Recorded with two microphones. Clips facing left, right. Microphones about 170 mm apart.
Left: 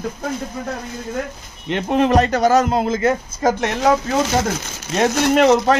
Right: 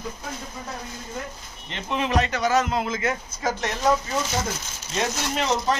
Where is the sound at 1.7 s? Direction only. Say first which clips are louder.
Left 9 dB; 45° left (ahead or behind).